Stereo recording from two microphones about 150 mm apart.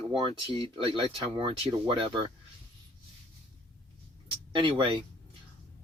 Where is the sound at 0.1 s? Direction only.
35° right (ahead or behind).